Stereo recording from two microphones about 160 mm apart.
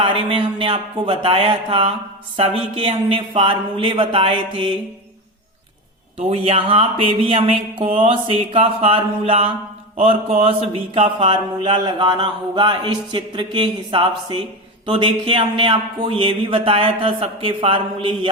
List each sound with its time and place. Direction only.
0.0 s mantra: 35° right (ahead or behind)
6.1 s mantra: 40° right (ahead or behind)